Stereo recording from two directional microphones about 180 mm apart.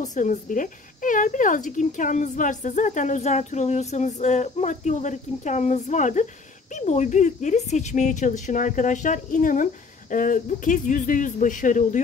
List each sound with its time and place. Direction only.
0.0 s speech: 45° left (ahead or behind)